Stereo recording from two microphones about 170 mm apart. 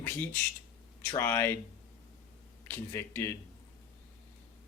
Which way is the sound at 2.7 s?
15° left (ahead or behind).